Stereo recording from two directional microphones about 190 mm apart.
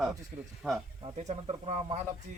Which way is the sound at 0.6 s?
5° right (ahead or behind).